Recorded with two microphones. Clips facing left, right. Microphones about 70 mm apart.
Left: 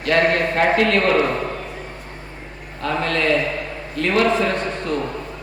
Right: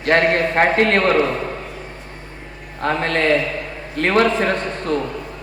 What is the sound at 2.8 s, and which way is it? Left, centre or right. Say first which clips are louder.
A man's voice: right 2 dB; right.